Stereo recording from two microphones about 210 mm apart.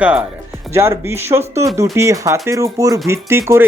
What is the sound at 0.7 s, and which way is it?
Speech, 10° right (ahead or behind).